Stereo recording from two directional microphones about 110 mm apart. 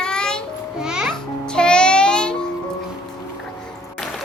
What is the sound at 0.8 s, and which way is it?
Music, 5° right (ahead or behind).